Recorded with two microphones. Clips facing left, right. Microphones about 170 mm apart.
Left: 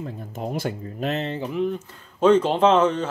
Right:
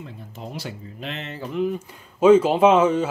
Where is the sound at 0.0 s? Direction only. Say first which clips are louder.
Left 6 dB; 50° left (ahead or behind).